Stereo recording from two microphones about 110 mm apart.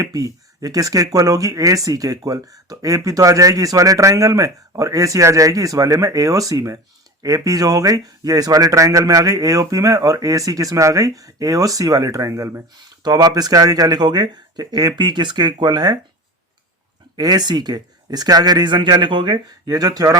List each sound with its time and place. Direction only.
0.0 s speech: 30° right (ahead or behind)
17.2 s speech: 40° right (ahead or behind)